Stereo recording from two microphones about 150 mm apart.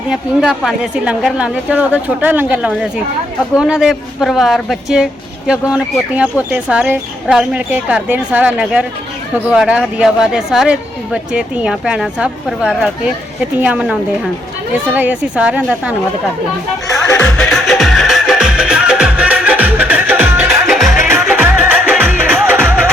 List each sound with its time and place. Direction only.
0.1 s speech: 5° right (ahead or behind)
14.9 s speech: 10° right (ahead or behind)
16.8 s speech: 20° left (ahead or behind)
17.3 s music: 5° left (ahead or behind); by 22.9 s 15° right (ahead or behind)